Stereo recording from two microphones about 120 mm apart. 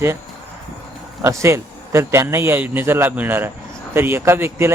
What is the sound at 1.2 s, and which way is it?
A man's voice, 25° right (ahead or behind).